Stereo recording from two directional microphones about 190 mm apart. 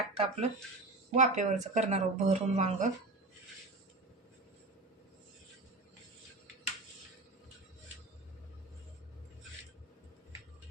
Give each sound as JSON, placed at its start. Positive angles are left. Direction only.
{"t": 0.1, "sound": "speech", "side_deg": -30}